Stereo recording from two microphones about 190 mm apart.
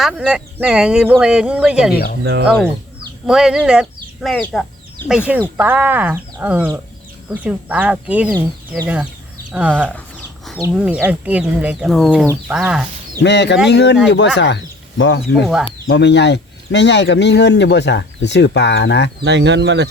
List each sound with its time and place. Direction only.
0.0 s speech: 5° right (ahead or behind)
9.5 s speech: 10° right (ahead or behind)
13.2 s speech: 65° left (ahead or behind)
19.2 s speech: 65° right (ahead or behind)